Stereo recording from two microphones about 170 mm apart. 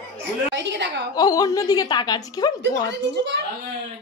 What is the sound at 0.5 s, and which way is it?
Speech, 90° right.